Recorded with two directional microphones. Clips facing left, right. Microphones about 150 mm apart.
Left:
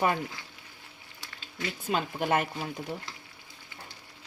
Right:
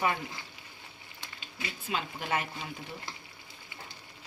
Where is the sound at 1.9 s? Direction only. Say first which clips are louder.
Left 6 dB; 50° left (ahead or behind).